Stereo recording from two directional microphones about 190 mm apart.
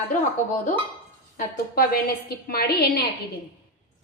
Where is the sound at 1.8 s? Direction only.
50° left (ahead or behind).